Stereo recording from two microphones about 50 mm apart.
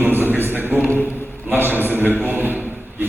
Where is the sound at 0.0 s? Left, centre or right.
Right.